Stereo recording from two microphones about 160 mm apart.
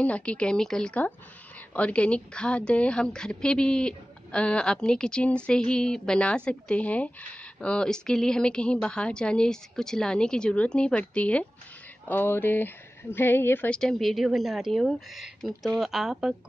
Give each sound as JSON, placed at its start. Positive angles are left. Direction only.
{"t": 0.0, "sound": "a woman's voice", "side_deg": 10}